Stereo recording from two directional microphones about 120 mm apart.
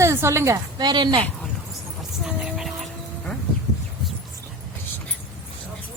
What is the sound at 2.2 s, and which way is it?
Music, 5° right (ahead or behind).